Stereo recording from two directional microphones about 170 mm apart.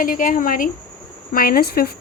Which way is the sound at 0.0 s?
55° left (ahead or behind).